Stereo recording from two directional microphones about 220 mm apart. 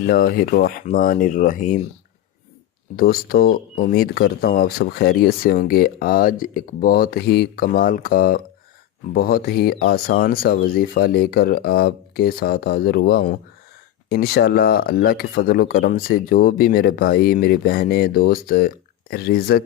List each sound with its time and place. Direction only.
0.0 s speech: 40° left (ahead or behind)
2.9 s speech: 40° left (ahead or behind)